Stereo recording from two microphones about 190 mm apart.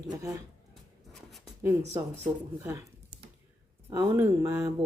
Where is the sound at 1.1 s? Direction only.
Centre (ahead or behind).